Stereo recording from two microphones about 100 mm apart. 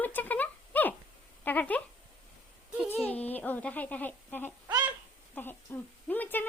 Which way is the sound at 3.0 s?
15° left (ahead or behind).